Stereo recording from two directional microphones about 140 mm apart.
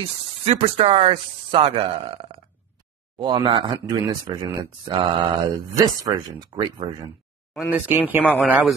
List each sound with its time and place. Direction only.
0.0 s speech: 45° right (ahead or behind)
7.5 s speech: 10° right (ahead or behind)
8.4 s speech: centre (ahead or behind)